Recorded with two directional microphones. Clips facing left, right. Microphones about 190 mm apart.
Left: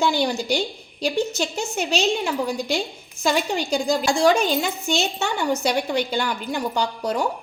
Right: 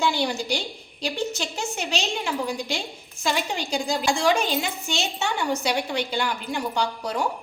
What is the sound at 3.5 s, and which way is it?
A woman's voice, 45° left (ahead or behind).